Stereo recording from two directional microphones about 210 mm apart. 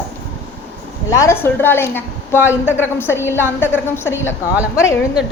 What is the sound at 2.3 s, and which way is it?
Speech, 10° right (ahead or behind).